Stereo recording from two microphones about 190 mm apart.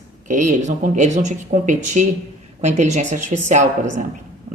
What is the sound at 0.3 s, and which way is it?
Speech, 40° right (ahead or behind).